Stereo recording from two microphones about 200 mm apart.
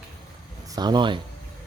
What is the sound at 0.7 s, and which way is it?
Speech, 20° right (ahead or behind).